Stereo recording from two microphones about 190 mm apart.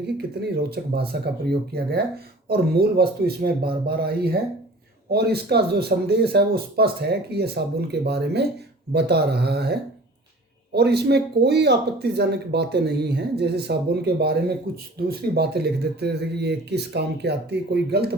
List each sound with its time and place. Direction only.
0.2 s speech: 55° right (ahead or behind)
10.8 s speech: 60° right (ahead or behind)
15.4 s speech: 60° right (ahead or behind)